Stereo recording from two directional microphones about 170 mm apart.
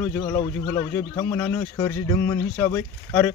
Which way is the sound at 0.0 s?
15° left (ahead or behind).